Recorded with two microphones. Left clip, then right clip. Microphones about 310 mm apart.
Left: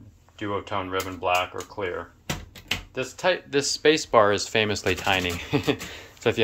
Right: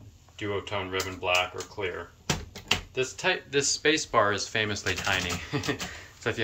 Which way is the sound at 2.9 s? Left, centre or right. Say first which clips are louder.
Left 3 dB; centre.